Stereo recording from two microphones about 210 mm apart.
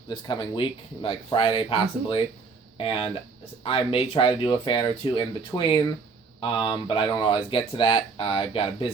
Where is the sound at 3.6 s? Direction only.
25° left (ahead or behind).